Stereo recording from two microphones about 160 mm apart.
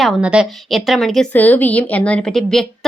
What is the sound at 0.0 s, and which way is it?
A woman's voice, 5° right (ahead or behind).